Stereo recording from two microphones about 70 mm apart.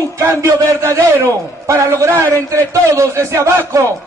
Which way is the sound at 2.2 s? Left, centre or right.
Right.